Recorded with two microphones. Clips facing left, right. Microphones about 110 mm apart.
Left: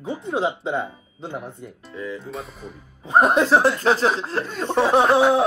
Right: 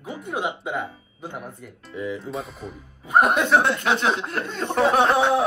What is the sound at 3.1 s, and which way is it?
Speech, 30° left (ahead or behind).